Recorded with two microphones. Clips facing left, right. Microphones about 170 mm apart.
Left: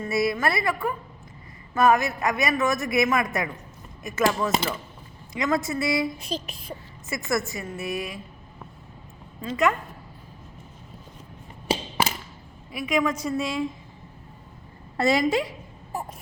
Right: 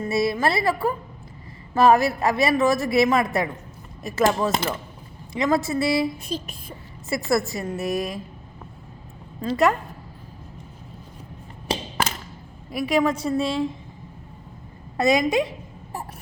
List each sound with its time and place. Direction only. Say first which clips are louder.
0.0 s a woman's voice: right 2 dB; 25° right (ahead or behind)
7.1 s a woman's voice: right 4 dB; 35° right (ahead or behind)
9.4 s a woman's voice: right 3 dB; 35° right (ahead or behind)
11.7 s a sound: left 1 dB; 10° left (ahead or behind)
12.7 s a woman's voice: right 3 dB; 35° right (ahead or behind)
14.9 s a woman's voice: right 2 dB; 15° right (ahead or behind)